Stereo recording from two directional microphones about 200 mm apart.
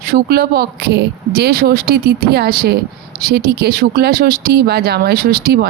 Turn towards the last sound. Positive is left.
turn(degrees=-50)  # may be behind; listen again after turning